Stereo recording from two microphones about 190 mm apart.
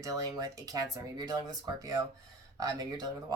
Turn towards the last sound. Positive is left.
turn(degrees=-20)  # may be behind; listen again after turning